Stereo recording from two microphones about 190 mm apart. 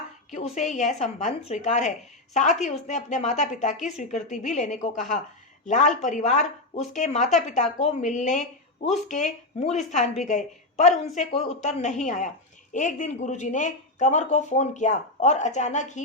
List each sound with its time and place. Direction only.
0.3 s speech: 35° left (ahead or behind)